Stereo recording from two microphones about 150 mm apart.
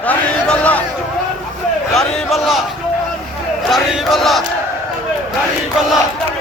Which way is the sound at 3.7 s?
Centre (ahead or behind).